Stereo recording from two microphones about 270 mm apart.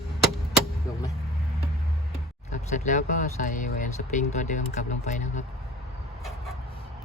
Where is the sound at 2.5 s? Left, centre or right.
Left.